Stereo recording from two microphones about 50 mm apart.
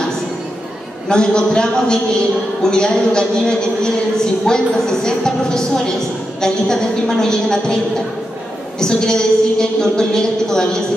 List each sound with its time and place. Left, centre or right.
1.0 s a man's voice: centre